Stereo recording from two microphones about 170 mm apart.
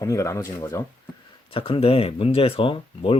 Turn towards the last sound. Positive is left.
turn(degrees=30)  # may be behind; listen again after turning